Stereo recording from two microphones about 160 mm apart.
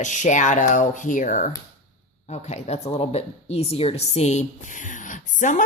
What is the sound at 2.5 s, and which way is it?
A woman's voice, 40° left (ahead or behind).